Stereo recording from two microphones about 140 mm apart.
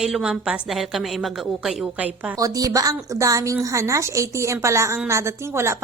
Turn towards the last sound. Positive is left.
turn(degrees=-20)  # may be behind; listen again after turning